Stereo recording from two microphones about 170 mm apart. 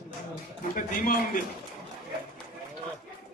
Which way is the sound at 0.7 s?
55° left (ahead or behind).